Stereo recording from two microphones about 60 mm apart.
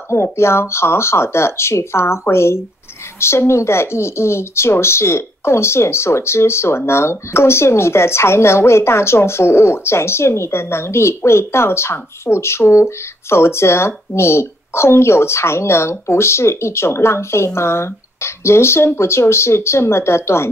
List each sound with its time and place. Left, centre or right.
0.1 s speech: left